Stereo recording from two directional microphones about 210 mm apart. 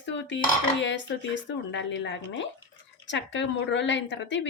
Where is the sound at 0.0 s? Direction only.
60° left (ahead or behind).